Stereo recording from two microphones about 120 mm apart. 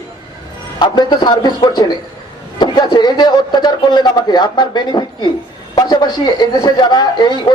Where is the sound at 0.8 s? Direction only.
40° left (ahead or behind).